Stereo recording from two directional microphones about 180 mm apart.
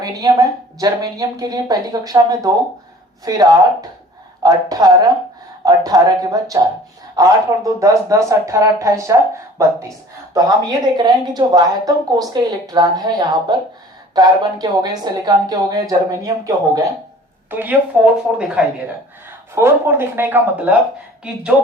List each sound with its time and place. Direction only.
0.0 s a woman's voice: 20° right (ahead or behind)